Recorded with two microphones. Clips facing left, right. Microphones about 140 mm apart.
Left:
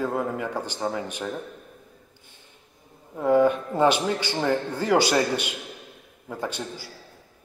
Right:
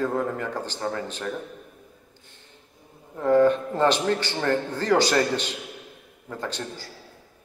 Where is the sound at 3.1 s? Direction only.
10° left (ahead or behind).